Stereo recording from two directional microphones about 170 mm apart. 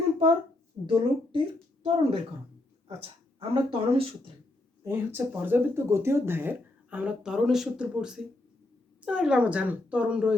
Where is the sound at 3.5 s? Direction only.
35° right (ahead or behind).